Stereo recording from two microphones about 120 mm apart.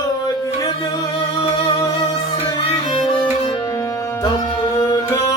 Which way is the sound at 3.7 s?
30° left (ahead or behind).